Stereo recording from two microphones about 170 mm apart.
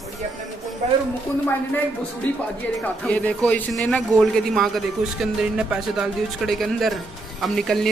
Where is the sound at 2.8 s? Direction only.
10° left (ahead or behind).